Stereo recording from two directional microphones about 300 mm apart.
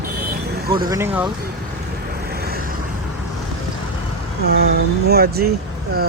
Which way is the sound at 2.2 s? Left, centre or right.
Right.